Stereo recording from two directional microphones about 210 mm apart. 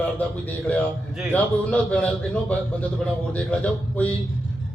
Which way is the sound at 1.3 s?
5° left (ahead or behind).